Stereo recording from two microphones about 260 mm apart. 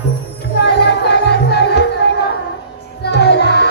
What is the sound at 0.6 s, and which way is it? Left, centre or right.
Music, left.